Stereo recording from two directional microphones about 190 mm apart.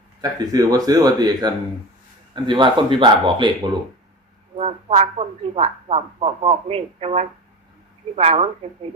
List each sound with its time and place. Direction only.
0.2 s speech: 20° right (ahead or behind)
4.5 s speech: 35° right (ahead or behind)